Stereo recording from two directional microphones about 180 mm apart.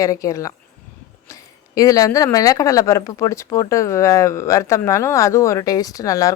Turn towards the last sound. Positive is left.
turn(degrees=20)  # may be behind; listen again after turning